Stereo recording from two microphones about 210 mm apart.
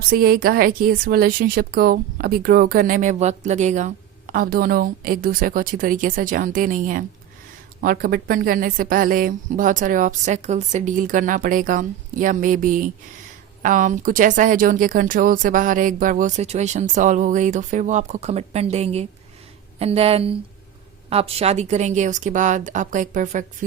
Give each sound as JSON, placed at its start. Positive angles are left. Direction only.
{"t": 0.1, "sound": "speech", "side_deg": -45}